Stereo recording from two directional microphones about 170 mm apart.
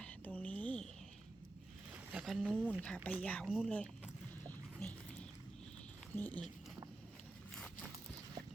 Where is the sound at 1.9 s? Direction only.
5° right (ahead or behind).